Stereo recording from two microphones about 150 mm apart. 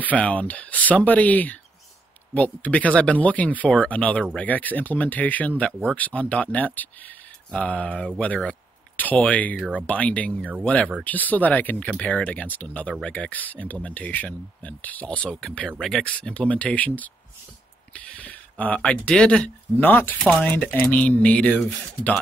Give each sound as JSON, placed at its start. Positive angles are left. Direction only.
{"t": 0.0, "sound": "speech", "side_deg": 10}
{"t": 5.7, "sound": "speech", "side_deg": -10}
{"t": 5.9, "sound": "speech", "side_deg": 10}